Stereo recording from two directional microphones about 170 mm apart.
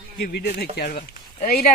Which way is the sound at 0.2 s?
65° left (ahead or behind).